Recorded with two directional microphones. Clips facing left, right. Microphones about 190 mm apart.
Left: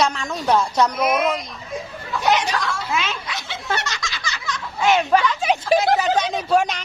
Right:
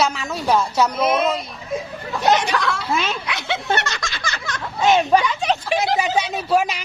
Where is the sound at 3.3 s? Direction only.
65° right (ahead or behind).